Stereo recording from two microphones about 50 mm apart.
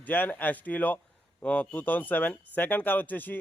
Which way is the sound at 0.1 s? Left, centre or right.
Left.